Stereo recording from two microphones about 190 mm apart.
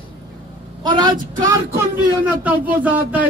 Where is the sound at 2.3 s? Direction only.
10° right (ahead or behind).